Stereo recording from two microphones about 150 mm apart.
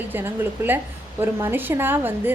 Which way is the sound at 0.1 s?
15° right (ahead or behind).